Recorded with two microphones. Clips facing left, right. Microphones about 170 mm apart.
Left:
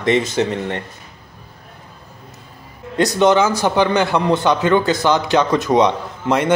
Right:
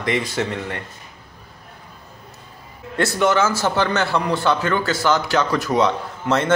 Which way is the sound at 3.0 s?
20° left (ahead or behind).